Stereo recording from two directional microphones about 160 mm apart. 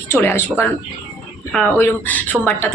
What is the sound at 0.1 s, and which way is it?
Speech, 15° left (ahead or behind).